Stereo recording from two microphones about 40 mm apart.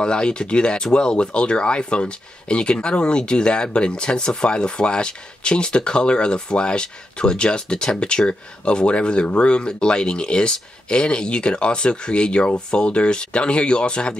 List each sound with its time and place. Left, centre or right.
0.0 s speech: left